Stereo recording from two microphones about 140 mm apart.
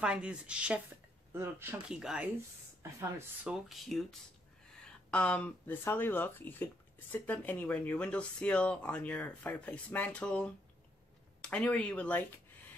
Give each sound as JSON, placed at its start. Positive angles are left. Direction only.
{"t": 0.0, "sound": "speech", "side_deg": -5}
{"t": 1.9, "sound": "speech", "side_deg": -5}
{"t": 2.8, "sound": "speech", "side_deg": -15}
{"t": 3.6, "sound": "speech", "side_deg": 0}